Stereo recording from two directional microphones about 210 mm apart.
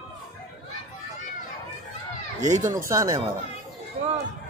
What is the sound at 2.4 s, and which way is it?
Speech, 35° right (ahead or behind).